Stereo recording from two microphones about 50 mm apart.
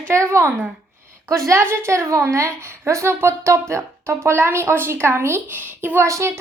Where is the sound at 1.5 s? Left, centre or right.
Right.